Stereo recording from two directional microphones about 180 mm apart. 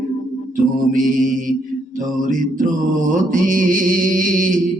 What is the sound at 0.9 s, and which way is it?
Mantra, 50° right (ahead or behind).